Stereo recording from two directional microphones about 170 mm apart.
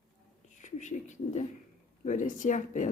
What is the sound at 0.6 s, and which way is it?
Speech, 45° left (ahead or behind).